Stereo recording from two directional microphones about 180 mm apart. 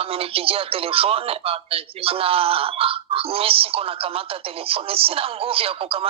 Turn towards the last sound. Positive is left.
turn(degrees=-30)  # may be behind; listen again after turning